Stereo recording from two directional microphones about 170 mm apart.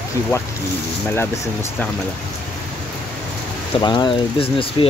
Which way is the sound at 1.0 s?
15° left (ahead or behind).